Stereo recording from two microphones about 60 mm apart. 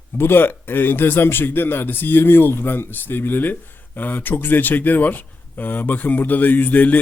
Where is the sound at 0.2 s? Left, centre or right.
Left.